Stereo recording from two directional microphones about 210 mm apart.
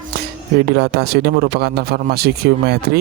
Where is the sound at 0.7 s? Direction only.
50° right (ahead or behind).